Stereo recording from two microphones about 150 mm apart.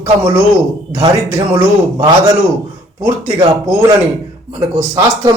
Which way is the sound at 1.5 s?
20° right (ahead or behind).